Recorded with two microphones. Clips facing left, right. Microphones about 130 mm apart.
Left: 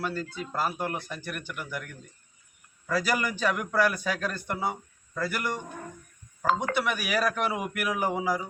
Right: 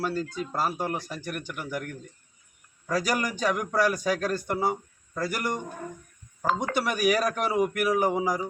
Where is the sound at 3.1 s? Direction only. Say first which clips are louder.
Right 1 dB; 40° right (ahead or behind).